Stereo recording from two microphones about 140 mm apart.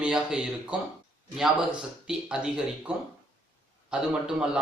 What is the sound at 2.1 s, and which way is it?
Speech, 5° right (ahead or behind).